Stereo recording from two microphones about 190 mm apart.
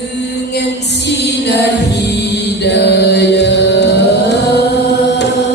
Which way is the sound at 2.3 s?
65° left (ahead or behind).